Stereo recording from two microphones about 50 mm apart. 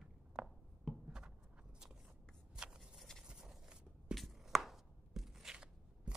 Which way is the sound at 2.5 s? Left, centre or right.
Centre.